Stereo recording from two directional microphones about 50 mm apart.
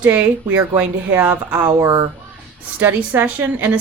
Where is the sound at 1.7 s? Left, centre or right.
Right.